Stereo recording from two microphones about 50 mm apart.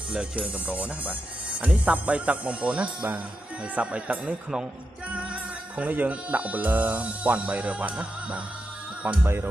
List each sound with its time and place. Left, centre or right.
0.1 s speech: right
9.2 s speech: right